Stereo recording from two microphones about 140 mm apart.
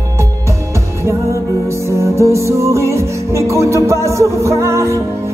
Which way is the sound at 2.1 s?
20° right (ahead or behind).